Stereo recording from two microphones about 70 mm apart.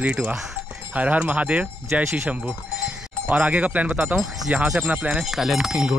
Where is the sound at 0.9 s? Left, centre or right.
Right.